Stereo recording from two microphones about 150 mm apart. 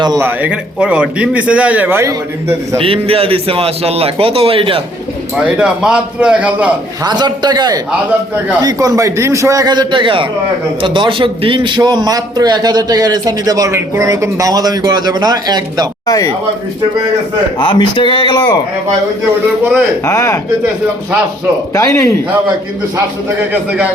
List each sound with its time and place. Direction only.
0.0 s a man's voice: 25° right (ahead or behind)
0.3 s a man's voice: 10° right (ahead or behind)
2.7 s a man's voice: 40° right (ahead or behind)
5.4 s a man's voice: 5° right (ahead or behind)
7.0 s a man's voice: 25° right (ahead or behind)
16.0 s speech: 25° left (ahead or behind)
17.6 s speech: 35° left (ahead or behind)
20.1 s speech: 20° left (ahead or behind)
21.8 s speech: 20° left (ahead or behind)
23.5 s a man's voice: 10° right (ahead or behind)